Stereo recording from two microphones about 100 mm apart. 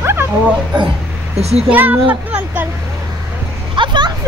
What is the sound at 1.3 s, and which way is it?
Speech, 90° right.